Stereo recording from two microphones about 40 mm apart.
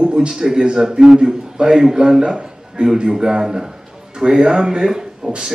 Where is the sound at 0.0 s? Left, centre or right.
Right.